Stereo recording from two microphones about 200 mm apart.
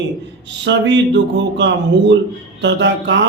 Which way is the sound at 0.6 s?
65° right (ahead or behind).